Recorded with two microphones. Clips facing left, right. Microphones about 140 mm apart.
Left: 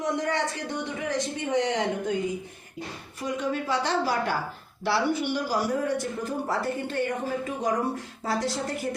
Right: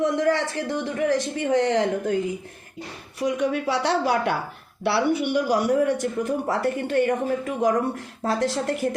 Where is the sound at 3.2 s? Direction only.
70° right (ahead or behind).